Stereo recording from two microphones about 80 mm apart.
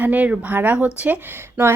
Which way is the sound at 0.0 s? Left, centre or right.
Centre.